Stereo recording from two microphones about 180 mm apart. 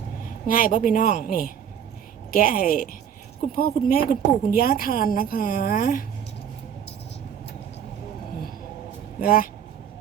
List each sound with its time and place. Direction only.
0.4 s a woman's voice: 50° left (ahead or behind)
9.2 s a woman's voice: 55° left (ahead or behind)